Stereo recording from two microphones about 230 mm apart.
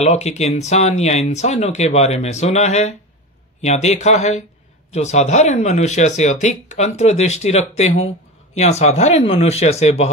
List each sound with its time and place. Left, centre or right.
0.0 s speech: left